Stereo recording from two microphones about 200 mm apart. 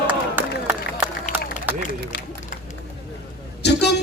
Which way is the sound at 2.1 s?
55° left (ahead or behind).